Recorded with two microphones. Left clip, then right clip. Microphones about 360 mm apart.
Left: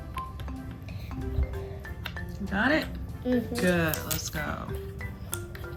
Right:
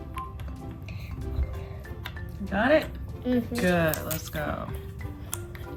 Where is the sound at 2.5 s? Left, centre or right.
Right.